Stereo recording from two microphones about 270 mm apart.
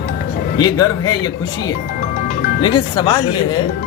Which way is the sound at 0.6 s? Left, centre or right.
Centre.